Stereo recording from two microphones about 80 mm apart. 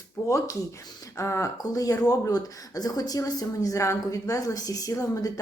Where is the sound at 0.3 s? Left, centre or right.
Left.